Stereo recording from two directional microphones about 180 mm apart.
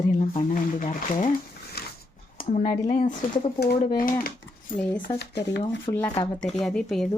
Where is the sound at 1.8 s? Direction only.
60° left (ahead or behind).